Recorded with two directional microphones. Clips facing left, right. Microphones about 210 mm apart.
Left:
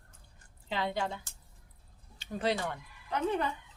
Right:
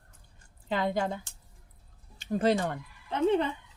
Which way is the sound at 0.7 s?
50° right (ahead or behind).